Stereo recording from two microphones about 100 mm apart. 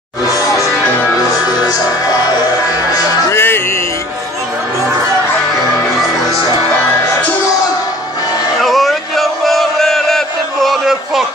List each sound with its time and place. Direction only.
0.3 s music: 35° left (ahead or behind)
1.7 s music: 40° left (ahead or behind)
3.3 s music: 25° left (ahead or behind)
8.5 s chant: centre (ahead or behind)